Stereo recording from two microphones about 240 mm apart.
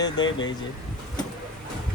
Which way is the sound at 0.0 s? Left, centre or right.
Left.